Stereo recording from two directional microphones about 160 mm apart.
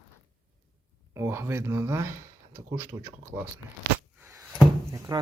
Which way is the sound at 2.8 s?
15° right (ahead or behind).